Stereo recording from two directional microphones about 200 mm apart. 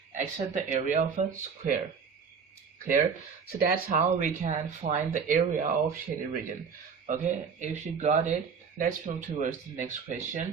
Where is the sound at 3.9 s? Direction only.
35° right (ahead or behind).